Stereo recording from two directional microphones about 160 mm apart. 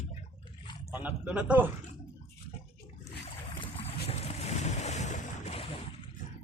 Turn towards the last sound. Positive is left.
turn(degrees=40)  # may be behind; listen again after turning